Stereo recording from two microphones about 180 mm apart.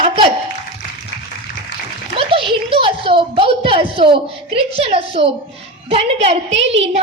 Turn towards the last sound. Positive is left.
turn(degrees=-90)